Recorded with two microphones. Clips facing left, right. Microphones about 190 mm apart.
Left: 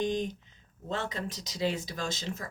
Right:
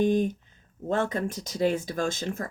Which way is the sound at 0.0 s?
55° right (ahead or behind).